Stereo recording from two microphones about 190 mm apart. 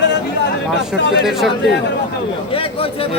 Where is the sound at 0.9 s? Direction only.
65° left (ahead or behind).